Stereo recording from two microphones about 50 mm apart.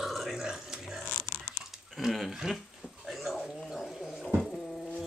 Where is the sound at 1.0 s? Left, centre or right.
Left.